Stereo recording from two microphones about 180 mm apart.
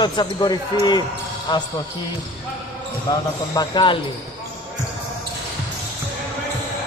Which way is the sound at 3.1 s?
20° left (ahead or behind).